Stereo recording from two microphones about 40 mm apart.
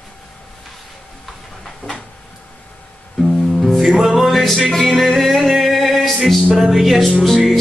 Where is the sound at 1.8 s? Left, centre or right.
Left.